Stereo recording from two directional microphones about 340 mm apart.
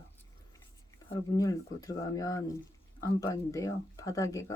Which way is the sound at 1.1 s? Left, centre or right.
Centre.